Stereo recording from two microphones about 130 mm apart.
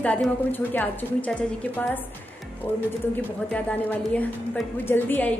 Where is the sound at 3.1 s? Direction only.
10° left (ahead or behind).